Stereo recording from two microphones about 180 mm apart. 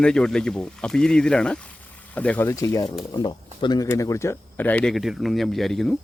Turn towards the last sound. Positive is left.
turn(degrees=0)  # may be behind; listen again after turning